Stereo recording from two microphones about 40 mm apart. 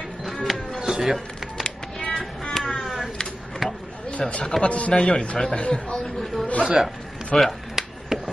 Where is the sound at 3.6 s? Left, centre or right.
Centre.